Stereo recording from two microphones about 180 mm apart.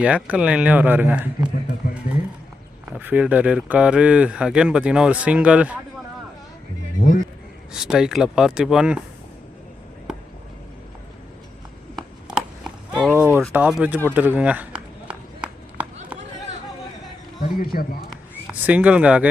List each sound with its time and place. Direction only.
0.0 s speech: 5° right (ahead or behind)
2.8 s speech: 10° right (ahead or behind)
7.0 s a sound: 50° left (ahead or behind)
7.7 s speech: 5° right (ahead or behind)
12.9 s a sound: 5° right (ahead or behind)
14.1 s run: 10° right (ahead or behind)
17.4 s speech: 55° left (ahead or behind)
18.6 s speech: 10° right (ahead or behind)